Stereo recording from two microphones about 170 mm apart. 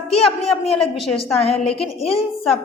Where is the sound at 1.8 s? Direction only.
35° left (ahead or behind).